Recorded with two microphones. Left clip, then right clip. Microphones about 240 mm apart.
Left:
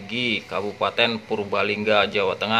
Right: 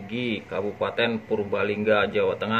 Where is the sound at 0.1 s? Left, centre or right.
Centre.